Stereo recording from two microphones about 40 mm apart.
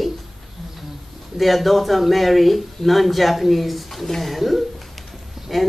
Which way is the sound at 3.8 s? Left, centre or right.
Centre.